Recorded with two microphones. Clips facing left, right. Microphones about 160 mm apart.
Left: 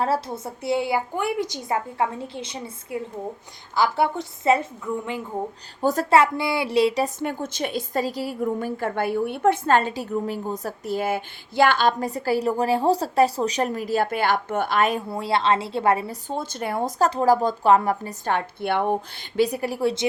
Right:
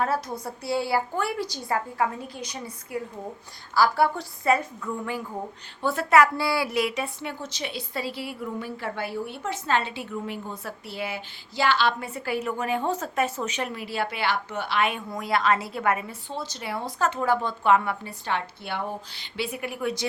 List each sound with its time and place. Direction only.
0.0 s a woman's voice: 30° left (ahead or behind)
5.8 s a woman's voice: 40° left (ahead or behind)
6.1 s a woman's voice: 20° left (ahead or behind)
16.3 s a woman's voice: 50° left (ahead or behind); by 20.1 s 30° left (ahead or behind)